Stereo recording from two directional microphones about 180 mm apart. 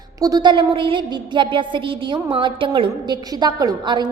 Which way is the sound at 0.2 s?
20° right (ahead or behind).